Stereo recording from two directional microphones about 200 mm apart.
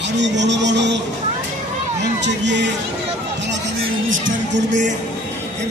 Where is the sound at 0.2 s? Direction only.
60° right (ahead or behind).